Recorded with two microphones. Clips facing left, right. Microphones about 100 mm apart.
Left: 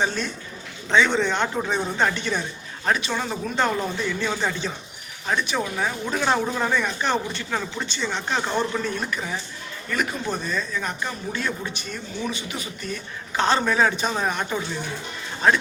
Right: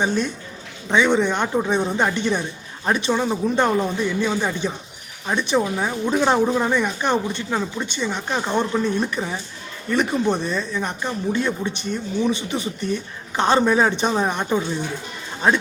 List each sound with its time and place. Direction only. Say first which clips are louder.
0.0 s a woman's voice: right 4 dB; 15° right (ahead or behind)
9.0 s speech: right 3 dB; 25° right (ahead or behind)